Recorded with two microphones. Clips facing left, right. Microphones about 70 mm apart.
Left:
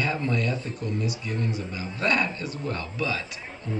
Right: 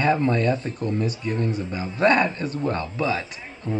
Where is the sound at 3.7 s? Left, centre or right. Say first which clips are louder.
Right 5 dB; right.